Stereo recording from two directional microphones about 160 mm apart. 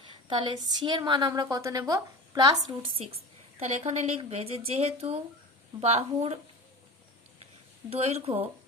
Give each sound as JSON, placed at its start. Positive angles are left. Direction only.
{"t": 0.1, "sound": "a woman's voice", "side_deg": -30}
{"t": 2.8, "sound": "speech", "side_deg": -40}
{"t": 7.9, "sound": "speech", "side_deg": -40}